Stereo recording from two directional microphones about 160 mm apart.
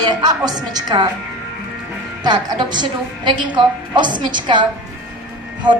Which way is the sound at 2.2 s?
30° right (ahead or behind).